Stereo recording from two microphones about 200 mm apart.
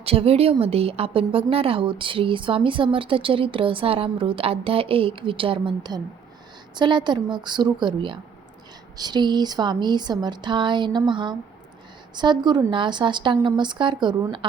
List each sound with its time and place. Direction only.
0.0 s a woman's voice: 30° right (ahead or behind)